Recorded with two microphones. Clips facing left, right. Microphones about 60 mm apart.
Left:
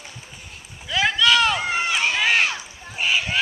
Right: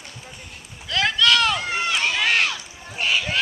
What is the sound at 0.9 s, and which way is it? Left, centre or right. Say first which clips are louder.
Run: left 1 dB; centre.